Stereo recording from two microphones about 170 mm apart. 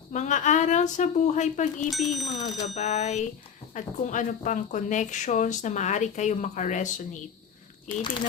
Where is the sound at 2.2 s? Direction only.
40° left (ahead or behind).